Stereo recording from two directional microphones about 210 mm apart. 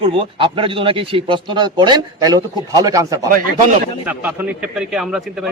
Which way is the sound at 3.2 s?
40° right (ahead or behind).